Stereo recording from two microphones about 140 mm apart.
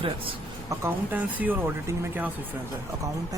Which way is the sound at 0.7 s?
15° right (ahead or behind).